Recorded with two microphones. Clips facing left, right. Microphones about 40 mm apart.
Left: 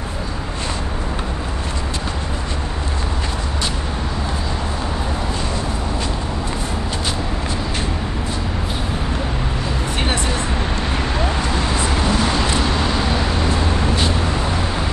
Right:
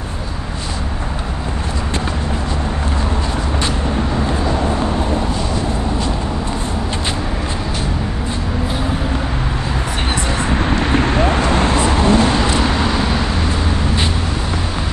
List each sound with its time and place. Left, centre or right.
10.8 s vehicle: right
11.9 s a sound: right
12.5 s vehicle: centre